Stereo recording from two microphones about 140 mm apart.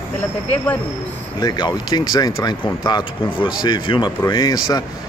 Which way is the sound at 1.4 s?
30° left (ahead or behind).